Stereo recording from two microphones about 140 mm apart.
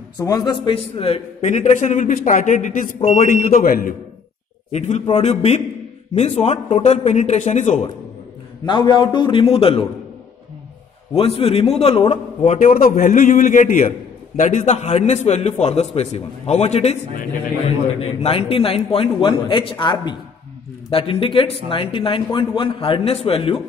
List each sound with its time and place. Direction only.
0.2 s a man's voice: 30° left (ahead or behind); by 2.9 s 65° left (ahead or behind)
3.0 s a man's voice: 50° left (ahead or behind)
3.3 s a man's voice: 75° left (ahead or behind); by 3.9 s 90° left
4.7 s a man's voice: 55° left (ahead or behind)
8.6 s a man's voice: 35° left (ahead or behind)
11.1 s a man's voice: 40° left (ahead or behind)
18.0 s a man's voice: 45° left (ahead or behind)